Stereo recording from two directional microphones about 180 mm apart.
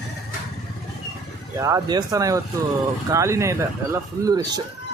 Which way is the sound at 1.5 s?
20° right (ahead or behind).